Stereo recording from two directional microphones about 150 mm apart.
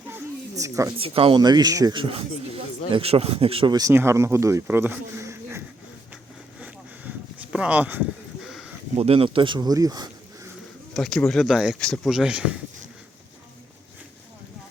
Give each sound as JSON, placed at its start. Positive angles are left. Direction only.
{"t": 0.5, "sound": "speech", "side_deg": -20}
{"t": 0.9, "sound": "speech", "side_deg": -40}
{"t": 1.4, "sound": "speech", "side_deg": -25}
{"t": 3.8, "sound": "speech", "side_deg": -20}
{"t": 7.5, "sound": "speech", "side_deg": -10}
{"t": 8.4, "sound": "a sound", "side_deg": 0}
{"t": 9.0, "sound": "speech", "side_deg": -40}
{"t": 10.9, "sound": "speech", "side_deg": 5}